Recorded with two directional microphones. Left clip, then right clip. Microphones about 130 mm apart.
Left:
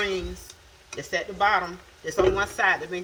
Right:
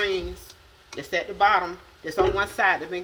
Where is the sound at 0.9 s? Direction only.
30° right (ahead or behind).